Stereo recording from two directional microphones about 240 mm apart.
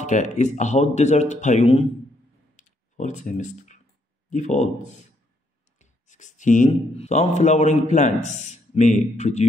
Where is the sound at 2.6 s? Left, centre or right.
Left.